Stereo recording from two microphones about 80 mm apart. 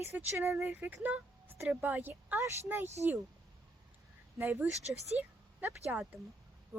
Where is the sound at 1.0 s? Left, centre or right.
Centre.